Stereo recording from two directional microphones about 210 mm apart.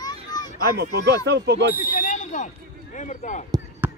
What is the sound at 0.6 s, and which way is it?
A man's voice, 50° right (ahead or behind).